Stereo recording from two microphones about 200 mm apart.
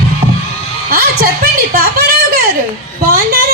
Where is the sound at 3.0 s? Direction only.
45° right (ahead or behind).